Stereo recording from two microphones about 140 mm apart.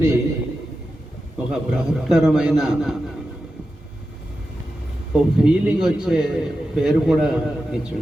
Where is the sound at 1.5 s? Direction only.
5° right (ahead or behind).